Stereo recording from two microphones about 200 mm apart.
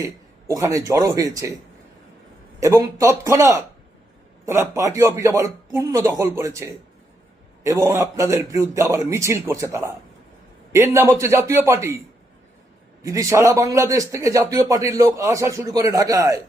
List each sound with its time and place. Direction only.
0.4 s a man's voice: 15° right (ahead or behind)
2.6 s a man's voice: 15° right (ahead or behind)